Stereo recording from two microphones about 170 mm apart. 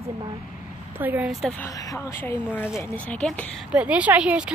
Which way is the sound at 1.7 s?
20° left (ahead or behind).